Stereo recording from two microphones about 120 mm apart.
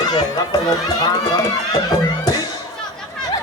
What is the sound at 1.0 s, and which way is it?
Run, 35° left (ahead or behind).